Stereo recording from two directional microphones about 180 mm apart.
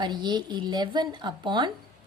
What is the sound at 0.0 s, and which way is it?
A woman's voice, 25° right (ahead or behind).